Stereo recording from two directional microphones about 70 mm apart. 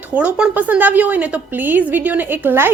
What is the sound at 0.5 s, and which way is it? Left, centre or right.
Speech, right.